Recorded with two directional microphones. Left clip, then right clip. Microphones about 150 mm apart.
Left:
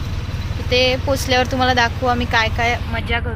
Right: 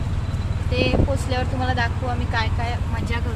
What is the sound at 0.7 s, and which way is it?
Speech, 50° left (ahead or behind).